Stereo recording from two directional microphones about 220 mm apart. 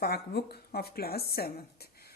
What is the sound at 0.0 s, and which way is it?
A woman's voice, 45° left (ahead or behind).